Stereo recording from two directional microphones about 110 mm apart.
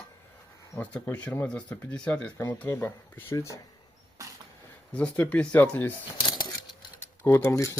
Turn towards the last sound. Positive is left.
turn(degrees=25)  # may be behind; listen again after turning